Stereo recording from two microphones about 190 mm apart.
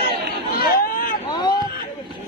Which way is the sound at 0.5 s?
55° left (ahead or behind).